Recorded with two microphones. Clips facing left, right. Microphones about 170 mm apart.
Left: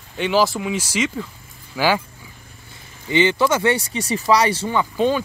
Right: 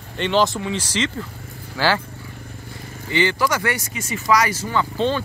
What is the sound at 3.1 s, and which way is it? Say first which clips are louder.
Speech: left 3 dB; 20° left (ahead or behind).